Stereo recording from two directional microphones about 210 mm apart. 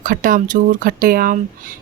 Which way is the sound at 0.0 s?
40° right (ahead or behind).